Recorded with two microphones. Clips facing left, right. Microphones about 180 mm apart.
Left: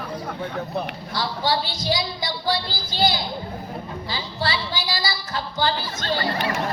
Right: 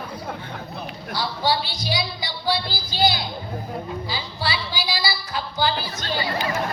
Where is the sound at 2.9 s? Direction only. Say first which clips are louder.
Even; 15° right (ahead or behind).